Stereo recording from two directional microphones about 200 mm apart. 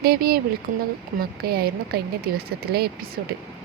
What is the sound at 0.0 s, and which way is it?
A woman's voice, 50° right (ahead or behind).